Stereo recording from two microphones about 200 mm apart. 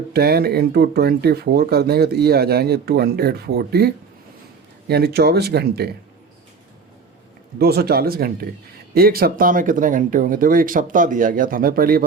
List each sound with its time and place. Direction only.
0.1 s speech: 50° right (ahead or behind)
7.6 s speech: 50° right (ahead or behind)